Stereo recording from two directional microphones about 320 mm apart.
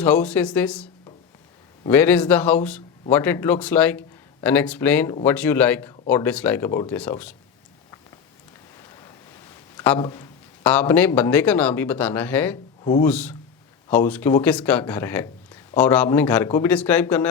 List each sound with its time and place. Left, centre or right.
0.0 s a man's voice: centre
9.8 s a man's voice: centre
12.8 s speech: centre
13.1 s a man's voice: centre